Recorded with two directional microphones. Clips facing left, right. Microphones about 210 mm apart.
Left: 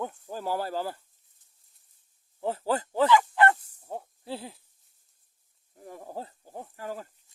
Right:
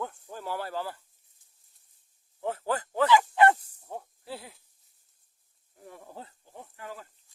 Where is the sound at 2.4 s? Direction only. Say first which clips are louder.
Left 2 dB; 30° left (ahead or behind).